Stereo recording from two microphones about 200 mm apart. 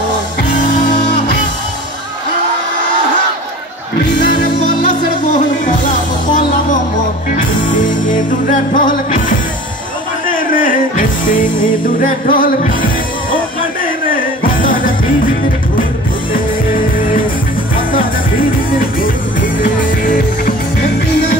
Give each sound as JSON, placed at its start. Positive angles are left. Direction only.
{"t": 4.3, "sound": "music", "side_deg": 40}
{"t": 7.3, "sound": "music", "side_deg": 40}
{"t": 10.3, "sound": "music", "side_deg": 45}
{"t": 18.7, "sound": "music", "side_deg": 45}